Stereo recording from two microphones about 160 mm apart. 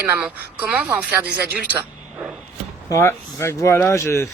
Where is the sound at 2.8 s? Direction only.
15° left (ahead or behind).